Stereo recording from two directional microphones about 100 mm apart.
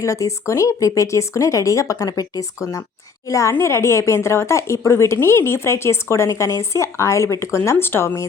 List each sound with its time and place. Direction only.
0.0 s a woman's voice: 30° left (ahead or behind)